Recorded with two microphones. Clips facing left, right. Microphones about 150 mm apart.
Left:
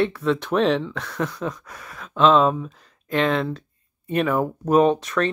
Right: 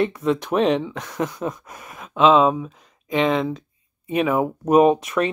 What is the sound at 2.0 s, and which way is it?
Speech, 5° right (ahead or behind).